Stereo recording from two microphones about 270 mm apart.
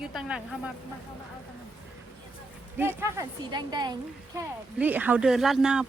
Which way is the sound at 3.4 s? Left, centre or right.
Centre.